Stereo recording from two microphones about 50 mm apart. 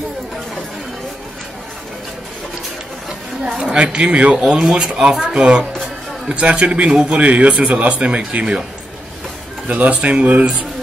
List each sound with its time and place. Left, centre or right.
3.7 s a man's voice: right
9.7 s a man's voice: right